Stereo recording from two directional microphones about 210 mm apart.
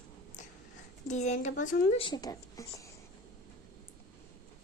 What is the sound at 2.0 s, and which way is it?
Speech, 20° left (ahead or behind).